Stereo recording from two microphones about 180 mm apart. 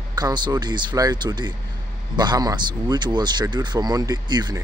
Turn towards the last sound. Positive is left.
turn(degrees=-20)  # may be behind; listen again after turning